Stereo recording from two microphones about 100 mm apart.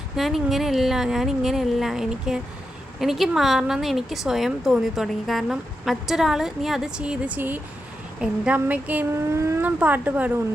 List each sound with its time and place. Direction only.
0.2 s a woman's voice: centre (ahead or behind)
9.3 s speech: 30° right (ahead or behind)
9.6 s speech: 15° right (ahead or behind)